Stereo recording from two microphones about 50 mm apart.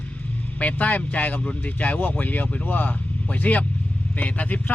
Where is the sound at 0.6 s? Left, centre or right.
Left.